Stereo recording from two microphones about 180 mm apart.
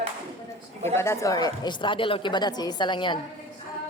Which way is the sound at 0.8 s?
15° left (ahead or behind).